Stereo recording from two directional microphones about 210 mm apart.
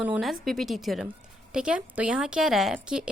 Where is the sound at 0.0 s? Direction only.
5° right (ahead or behind).